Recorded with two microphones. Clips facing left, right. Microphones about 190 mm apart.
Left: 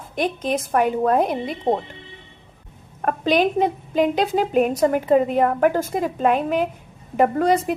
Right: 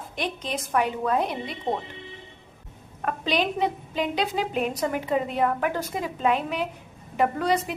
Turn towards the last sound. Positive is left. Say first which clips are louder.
# left 6 dB
turn(degrees=50)  # may be behind; listen again after turning